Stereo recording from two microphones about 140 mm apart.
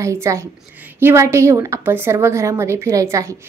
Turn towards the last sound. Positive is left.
turn(degrees=-20)  # may be behind; listen again after turning